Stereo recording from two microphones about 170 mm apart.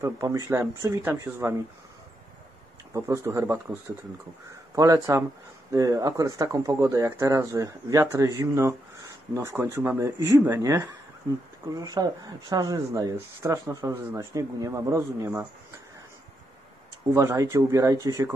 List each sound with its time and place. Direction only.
0.0 s speech: 20° right (ahead or behind)
2.9 s speech: 15° right (ahead or behind)
4.7 s speech: 20° right (ahead or behind)
17.1 s speech: 15° right (ahead or behind)